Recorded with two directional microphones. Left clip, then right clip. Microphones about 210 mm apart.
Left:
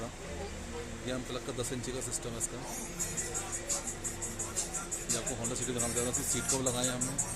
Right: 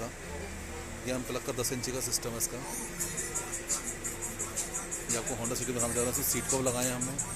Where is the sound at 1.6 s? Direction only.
10° right (ahead or behind).